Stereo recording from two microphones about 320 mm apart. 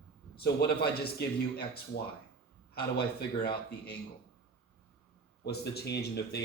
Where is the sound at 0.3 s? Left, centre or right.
Left.